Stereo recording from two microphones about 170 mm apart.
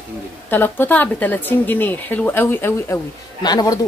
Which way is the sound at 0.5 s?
10° left (ahead or behind).